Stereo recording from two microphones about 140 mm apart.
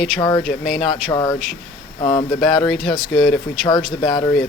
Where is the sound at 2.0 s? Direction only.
40° left (ahead or behind).